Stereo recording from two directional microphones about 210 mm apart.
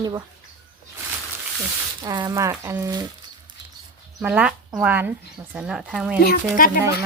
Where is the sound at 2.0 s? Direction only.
20° right (ahead or behind).